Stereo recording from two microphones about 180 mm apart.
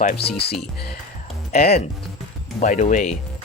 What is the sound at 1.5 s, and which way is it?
Speech, 55° left (ahead or behind).